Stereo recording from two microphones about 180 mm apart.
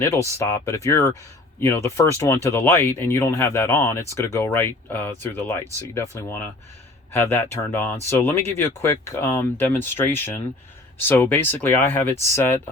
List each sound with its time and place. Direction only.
0.0 s speech: 15° left (ahead or behind)